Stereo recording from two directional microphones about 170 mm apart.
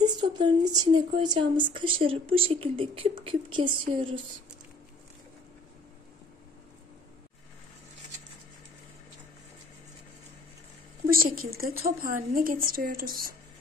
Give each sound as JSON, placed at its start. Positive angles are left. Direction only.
{"t": 0.0, "sound": "speech", "side_deg": -25}
{"t": 11.1, "sound": "a woman's voice", "side_deg": -60}